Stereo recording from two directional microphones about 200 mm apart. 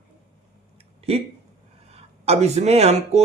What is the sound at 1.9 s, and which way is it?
Speech, 30° right (ahead or behind).